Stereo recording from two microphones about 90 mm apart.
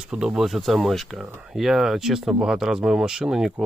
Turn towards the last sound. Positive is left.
turn(degrees=-5)  # may be behind; listen again after turning